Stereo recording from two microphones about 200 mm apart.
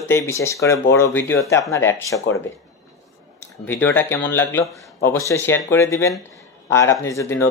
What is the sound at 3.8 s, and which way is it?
Speech, 10° left (ahead or behind).